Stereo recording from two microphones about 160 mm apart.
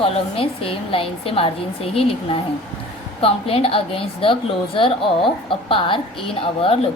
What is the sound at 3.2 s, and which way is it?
A woman's voice, 35° left (ahead or behind).